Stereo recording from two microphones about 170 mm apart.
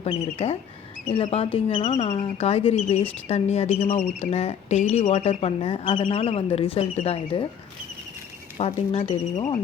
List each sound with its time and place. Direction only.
0.0 s speech: 35° left (ahead or behind)
8.5 s speech: 35° left (ahead or behind)